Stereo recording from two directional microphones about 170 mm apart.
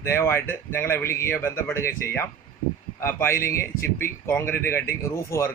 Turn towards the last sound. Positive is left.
turn(degrees=15)  # may be behind; listen again after turning